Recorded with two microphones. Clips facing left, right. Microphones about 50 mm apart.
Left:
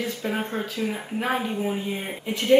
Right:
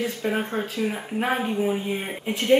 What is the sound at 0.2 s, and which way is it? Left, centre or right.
Speech, centre.